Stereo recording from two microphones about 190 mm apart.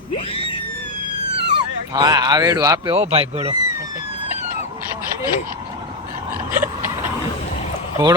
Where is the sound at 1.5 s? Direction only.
20° right (ahead or behind).